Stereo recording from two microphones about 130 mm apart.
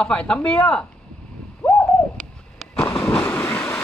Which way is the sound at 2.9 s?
10° left (ahead or behind).